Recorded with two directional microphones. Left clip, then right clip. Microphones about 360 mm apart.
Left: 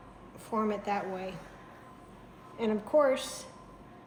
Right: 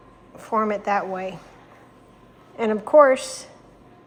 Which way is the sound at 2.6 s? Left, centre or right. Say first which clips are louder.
Right 12 dB; centre.